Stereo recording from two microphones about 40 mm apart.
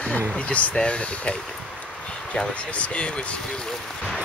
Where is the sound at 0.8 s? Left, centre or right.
Left.